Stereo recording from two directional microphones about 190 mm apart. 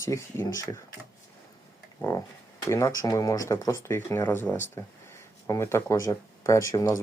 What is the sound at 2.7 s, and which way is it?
Speech, 15° left (ahead or behind).